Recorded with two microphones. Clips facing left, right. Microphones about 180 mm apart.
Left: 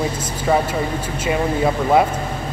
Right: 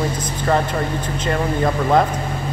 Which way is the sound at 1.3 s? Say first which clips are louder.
Left 1 dB; 5° left (ahead or behind).